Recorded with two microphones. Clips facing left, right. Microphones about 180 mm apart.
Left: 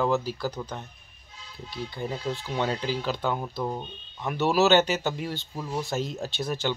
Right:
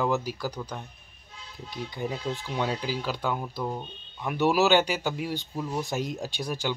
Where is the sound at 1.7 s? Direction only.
15° right (ahead or behind).